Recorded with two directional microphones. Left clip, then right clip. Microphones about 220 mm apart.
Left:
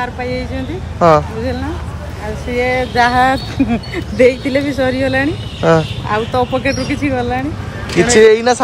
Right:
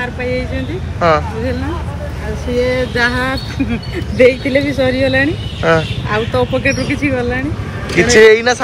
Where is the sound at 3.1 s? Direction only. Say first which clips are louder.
Left 6 dB; 40° left (ahead or behind).